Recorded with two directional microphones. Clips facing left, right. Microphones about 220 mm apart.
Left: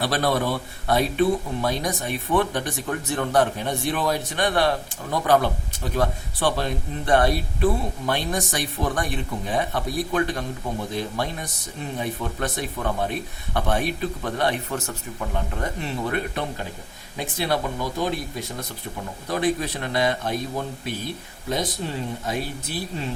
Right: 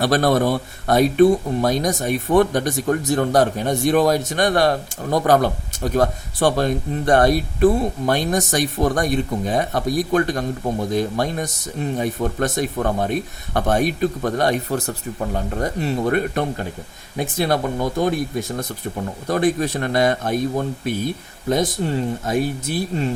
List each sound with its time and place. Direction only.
0.0 s speech: 45° right (ahead or behind)
22.7 s speech: 50° right (ahead or behind)